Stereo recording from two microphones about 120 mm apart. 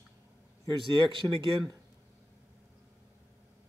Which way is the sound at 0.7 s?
40° right (ahead or behind).